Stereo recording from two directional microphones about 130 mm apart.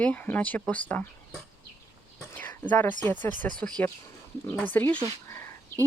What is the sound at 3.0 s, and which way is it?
Speech, 15° left (ahead or behind).